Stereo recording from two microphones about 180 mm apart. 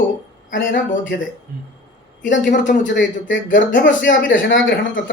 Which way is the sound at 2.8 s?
90° left.